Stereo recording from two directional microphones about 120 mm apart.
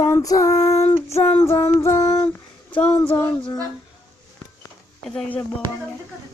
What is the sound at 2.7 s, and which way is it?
Speech, 15° left (ahead or behind).